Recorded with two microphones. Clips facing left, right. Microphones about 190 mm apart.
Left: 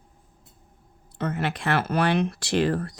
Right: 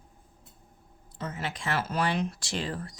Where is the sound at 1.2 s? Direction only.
65° left (ahead or behind).